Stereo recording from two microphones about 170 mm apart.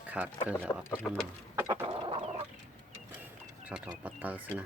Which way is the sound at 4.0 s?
10° right (ahead or behind).